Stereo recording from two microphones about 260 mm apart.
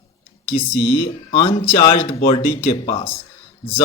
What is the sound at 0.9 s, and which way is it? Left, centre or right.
Speech, centre.